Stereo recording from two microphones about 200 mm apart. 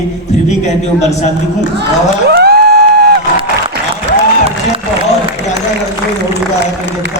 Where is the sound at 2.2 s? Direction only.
55° right (ahead or behind).